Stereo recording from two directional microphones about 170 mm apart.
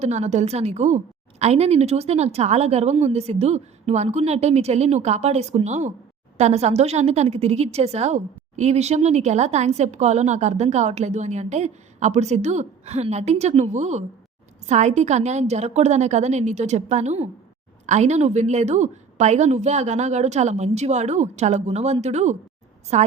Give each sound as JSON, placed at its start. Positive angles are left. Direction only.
{"t": 0.0, "sound": "a woman's voice", "side_deg": -40}